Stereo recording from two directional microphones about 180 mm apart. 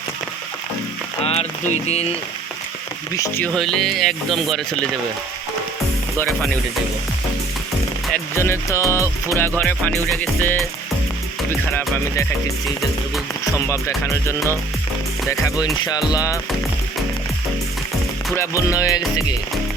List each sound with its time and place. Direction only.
1.2 s speech: 35° left (ahead or behind)
3.2 s music: 10° left (ahead or behind)
3.5 s speech: centre (ahead or behind)
6.2 s speech: centre (ahead or behind)
8.4 s music: 15° left (ahead or behind)
11.7 s music: 10° left (ahead or behind)
13.8 s music: 15° left (ahead or behind)
18.3 s music: 20° left (ahead or behind)